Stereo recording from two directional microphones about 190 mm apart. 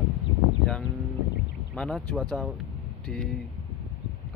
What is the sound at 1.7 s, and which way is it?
Speech, 5° left (ahead or behind).